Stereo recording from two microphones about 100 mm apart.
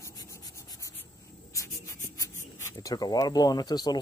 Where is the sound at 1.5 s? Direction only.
30° left (ahead or behind).